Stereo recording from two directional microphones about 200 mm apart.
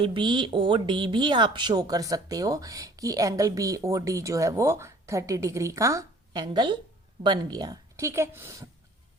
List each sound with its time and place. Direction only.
0.0 s speech: 25° right (ahead or behind)